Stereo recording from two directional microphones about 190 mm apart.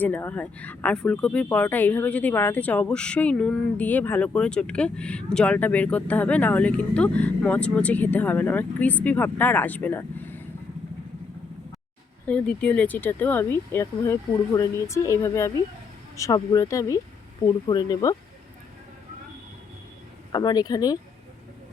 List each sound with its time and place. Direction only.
0.0 s speech: 10° left (ahead or behind)
12.2 s speech: 5° left (ahead or behind)
20.3 s speech: 20° left (ahead or behind)